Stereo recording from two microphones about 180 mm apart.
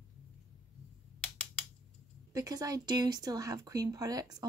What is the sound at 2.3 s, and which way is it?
Speech, 20° right (ahead or behind).